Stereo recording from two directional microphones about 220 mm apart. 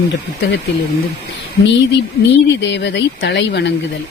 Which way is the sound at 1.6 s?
50° left (ahead or behind).